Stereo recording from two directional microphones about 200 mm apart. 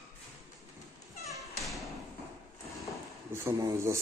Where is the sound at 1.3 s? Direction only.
Centre (ahead or behind).